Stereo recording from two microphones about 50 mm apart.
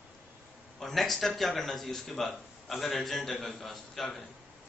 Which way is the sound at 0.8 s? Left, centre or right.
Centre.